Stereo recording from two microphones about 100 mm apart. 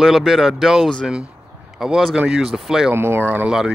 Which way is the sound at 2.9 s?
20° right (ahead or behind).